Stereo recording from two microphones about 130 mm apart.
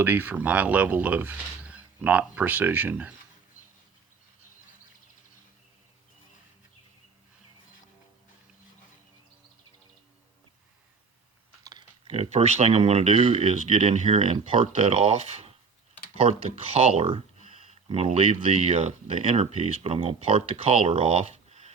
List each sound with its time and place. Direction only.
0.0 s speech: 15° right (ahead or behind)
11.6 s typing: 30° right (ahead or behind)
12.0 s speech: 55° right (ahead or behind)